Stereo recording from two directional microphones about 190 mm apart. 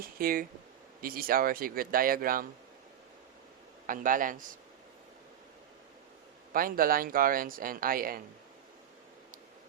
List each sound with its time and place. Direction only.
0.0 s speech: 50° right (ahead or behind)
3.8 s speech: 45° right (ahead or behind)
6.5 s speech: 50° right (ahead or behind)